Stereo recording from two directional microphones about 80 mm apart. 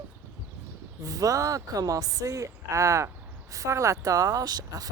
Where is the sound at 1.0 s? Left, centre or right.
Right.